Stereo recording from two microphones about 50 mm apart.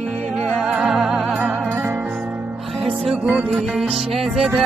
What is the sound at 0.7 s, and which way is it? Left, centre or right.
Music, centre.